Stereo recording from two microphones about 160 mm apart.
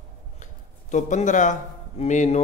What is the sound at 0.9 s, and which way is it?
A man's voice, 50° left (ahead or behind).